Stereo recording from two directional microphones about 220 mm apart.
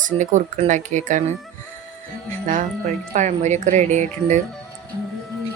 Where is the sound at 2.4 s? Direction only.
35° right (ahead or behind).